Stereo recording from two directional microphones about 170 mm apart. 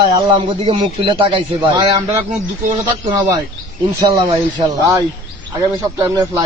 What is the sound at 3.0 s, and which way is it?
Speech, 20° right (ahead or behind).